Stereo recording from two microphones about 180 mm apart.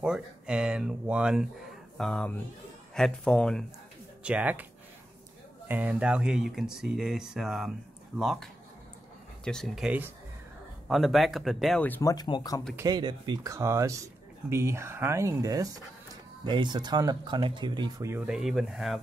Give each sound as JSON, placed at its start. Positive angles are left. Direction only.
{"t": 0.0, "sound": "speech", "side_deg": -5}
{"t": 4.2, "sound": "speech", "side_deg": -5}
{"t": 5.7, "sound": "speech", "side_deg": -10}
{"t": 12.7, "sound": "speech", "side_deg": -20}
{"t": 18.3, "sound": "speech", "side_deg": 0}